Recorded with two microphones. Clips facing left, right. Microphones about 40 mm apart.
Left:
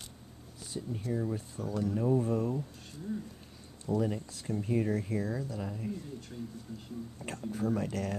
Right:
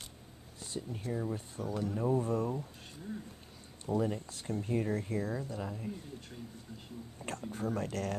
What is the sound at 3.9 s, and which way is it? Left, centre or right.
Speech, centre.